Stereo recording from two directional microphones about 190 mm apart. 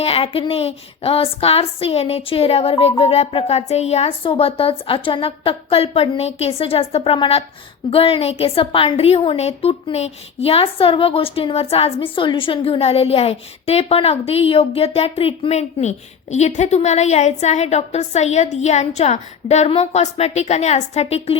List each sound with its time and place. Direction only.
0.0 s a woman's voice: 30° left (ahead or behind)